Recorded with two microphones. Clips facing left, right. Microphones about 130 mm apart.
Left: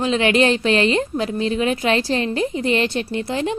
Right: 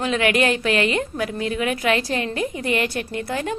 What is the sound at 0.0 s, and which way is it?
A woman's voice, 25° left (ahead or behind).